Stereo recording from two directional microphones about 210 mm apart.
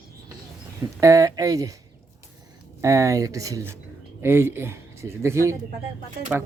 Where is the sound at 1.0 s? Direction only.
15° right (ahead or behind).